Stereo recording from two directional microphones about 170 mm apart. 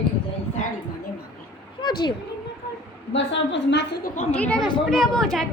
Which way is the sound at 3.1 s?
90° left.